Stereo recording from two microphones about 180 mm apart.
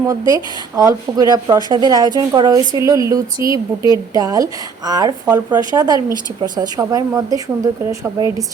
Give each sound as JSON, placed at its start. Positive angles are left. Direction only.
{"t": 0.1, "sound": "a woman's voice", "side_deg": -20}